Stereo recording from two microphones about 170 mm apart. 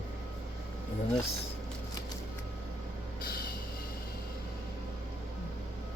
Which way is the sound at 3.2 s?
65° left (ahead or behind).